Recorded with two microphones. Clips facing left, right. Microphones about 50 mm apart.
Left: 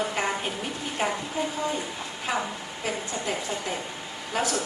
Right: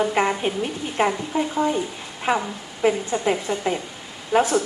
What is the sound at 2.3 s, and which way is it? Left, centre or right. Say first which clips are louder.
A woman's voice: right 7 dB; right.